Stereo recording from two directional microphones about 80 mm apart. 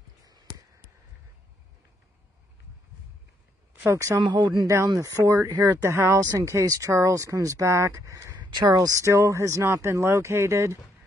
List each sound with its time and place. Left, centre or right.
0.2 s basketball bounce: right
3.8 s speech: right
4.2 s speech: right
4.8 s speech: right